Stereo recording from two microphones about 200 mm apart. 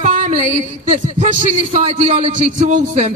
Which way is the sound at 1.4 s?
30° right (ahead or behind).